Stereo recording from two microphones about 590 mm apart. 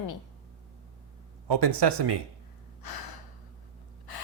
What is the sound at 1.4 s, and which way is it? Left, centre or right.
Speech, right.